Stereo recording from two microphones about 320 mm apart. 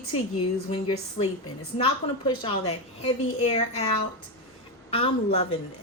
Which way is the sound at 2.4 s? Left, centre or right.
Centre.